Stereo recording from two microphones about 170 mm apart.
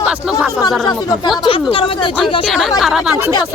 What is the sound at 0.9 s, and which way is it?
Speech, 20° left (ahead or behind).